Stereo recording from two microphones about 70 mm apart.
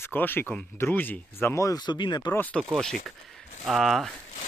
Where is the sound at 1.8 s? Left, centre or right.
Left.